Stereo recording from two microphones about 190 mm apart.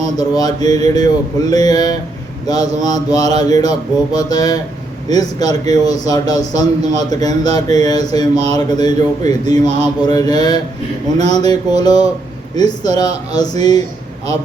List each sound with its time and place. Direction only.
0.0 s a man's voice: 20° left (ahead or behind)